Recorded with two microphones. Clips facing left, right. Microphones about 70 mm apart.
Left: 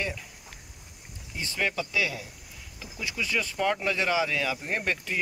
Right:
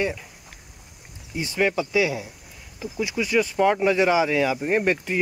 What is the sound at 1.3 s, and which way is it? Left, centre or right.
Speech, centre.